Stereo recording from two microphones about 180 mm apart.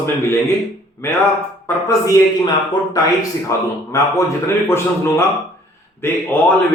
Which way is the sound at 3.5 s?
15° left (ahead or behind).